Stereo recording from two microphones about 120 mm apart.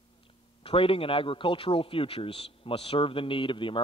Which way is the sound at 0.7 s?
50° left (ahead or behind).